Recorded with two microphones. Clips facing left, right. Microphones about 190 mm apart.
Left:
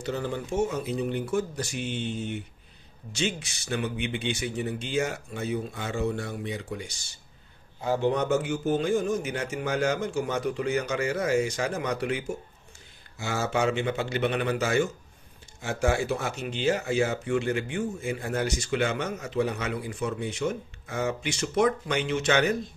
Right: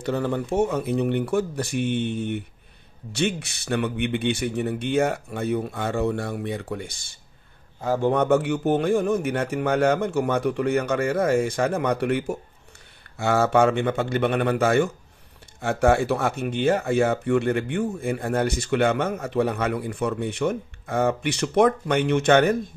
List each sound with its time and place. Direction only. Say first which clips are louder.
0.0 s speech: right 6 dB; 60° right (ahead or behind)